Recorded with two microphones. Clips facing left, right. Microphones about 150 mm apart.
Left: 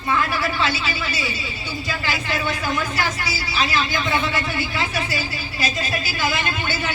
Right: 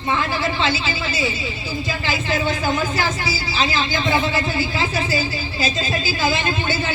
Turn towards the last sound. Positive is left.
turn(degrees=-25)  # may be behind; listen again after turning